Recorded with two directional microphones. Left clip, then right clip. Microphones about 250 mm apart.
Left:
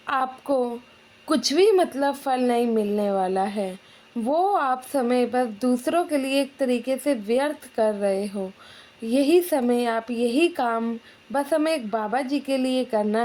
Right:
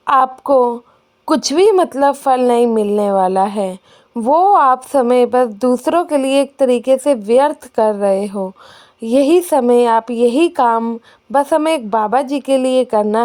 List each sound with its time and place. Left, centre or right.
0.0 s speech: right